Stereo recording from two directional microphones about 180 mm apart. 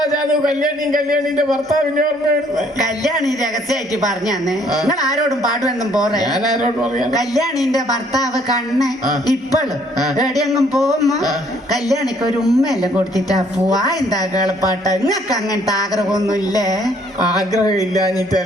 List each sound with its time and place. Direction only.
4.3 s speech: centre (ahead or behind)
7.2 s speech: centre (ahead or behind)
10.2 s speech: 20° left (ahead or behind)
10.8 s speech: centre (ahead or behind)
13.7 s speech: 20° left (ahead or behind)
16.3 s speech: 20° left (ahead or behind)